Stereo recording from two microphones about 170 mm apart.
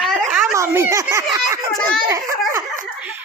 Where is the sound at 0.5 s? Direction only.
15° right (ahead or behind).